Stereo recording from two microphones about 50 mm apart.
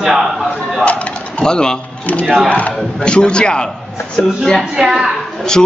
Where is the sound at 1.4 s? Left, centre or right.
Centre.